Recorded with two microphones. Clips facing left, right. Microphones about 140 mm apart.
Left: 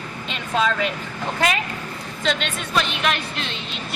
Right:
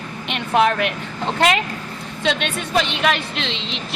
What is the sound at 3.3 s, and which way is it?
Speech, 90° right.